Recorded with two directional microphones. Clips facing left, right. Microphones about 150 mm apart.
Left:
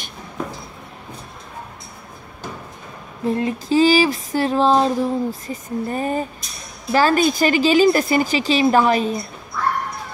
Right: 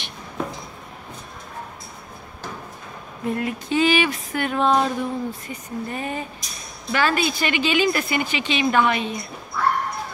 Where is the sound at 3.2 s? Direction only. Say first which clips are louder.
Left 4 dB; 30° left (ahead or behind).